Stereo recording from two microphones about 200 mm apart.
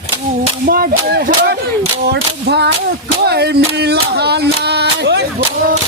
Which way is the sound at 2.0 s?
55° right (ahead or behind).